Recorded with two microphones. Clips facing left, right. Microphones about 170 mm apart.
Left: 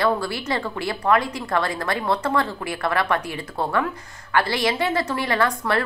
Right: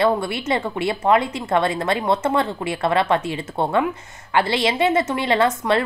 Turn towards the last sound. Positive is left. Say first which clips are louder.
# right 3 dB
turn(degrees=-25)  # may be behind; listen again after turning